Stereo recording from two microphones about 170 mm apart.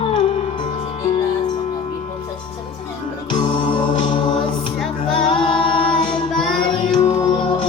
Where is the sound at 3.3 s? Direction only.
30° left (ahead or behind).